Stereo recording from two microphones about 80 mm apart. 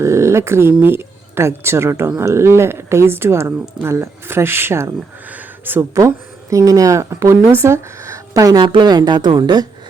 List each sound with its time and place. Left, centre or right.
0.0 s speech: right
5.2 s speech: right
5.9 s speech: right
8.5 s speech: right
9.4 s speech: right